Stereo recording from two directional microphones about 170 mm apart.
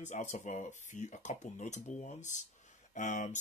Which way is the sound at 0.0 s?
45° left (ahead or behind).